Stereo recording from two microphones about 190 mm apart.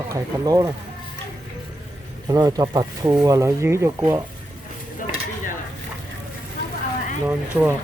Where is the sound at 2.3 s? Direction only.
20° right (ahead or behind).